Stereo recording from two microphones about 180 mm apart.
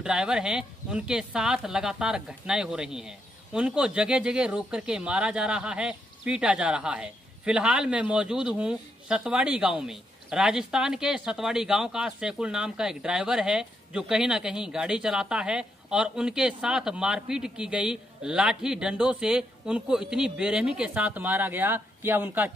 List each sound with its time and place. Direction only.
0.0 s speech: 5° right (ahead or behind)